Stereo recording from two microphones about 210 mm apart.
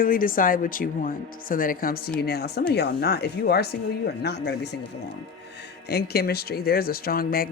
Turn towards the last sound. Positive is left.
turn(degrees=45)  # may be behind; listen again after turning